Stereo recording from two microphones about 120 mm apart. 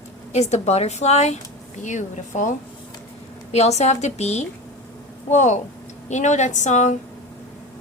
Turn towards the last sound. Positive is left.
turn(degrees=80)